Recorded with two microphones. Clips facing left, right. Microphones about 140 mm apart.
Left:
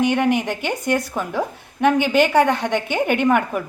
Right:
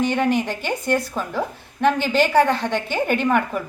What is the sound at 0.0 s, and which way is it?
A woman's voice, 15° left (ahead or behind).